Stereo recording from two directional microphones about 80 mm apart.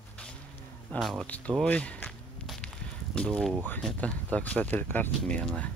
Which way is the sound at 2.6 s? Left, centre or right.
Centre.